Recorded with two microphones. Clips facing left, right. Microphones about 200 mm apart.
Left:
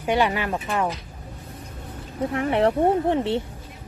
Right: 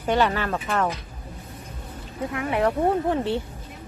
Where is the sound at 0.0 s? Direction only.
15° left (ahead or behind).